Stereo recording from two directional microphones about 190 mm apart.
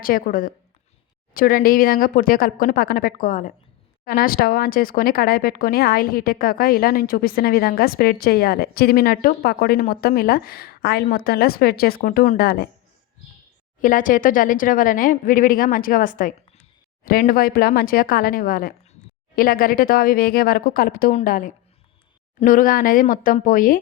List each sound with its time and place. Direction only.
0.0 s speech: 50° left (ahead or behind)
13.8 s speech: 45° left (ahead or behind)